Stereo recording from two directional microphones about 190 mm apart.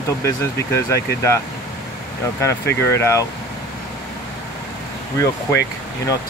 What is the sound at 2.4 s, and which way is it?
Speech, 15° left (ahead or behind).